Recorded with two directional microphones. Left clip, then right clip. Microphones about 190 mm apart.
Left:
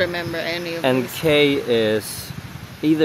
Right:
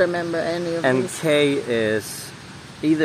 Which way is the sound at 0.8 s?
25° left (ahead or behind).